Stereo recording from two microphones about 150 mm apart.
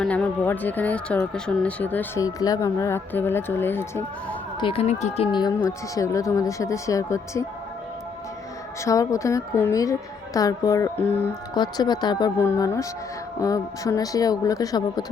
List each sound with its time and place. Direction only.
0.0 s speech: 10° left (ahead or behind)
2.2 s speech: 25° left (ahead or behind)
4.6 s speech: 40° left (ahead or behind)
5.3 s speech: 30° left (ahead or behind)
8.8 s speech: 20° left (ahead or behind)
11.5 s speech: 30° left (ahead or behind)
12.4 s speech: 15° left (ahead or behind)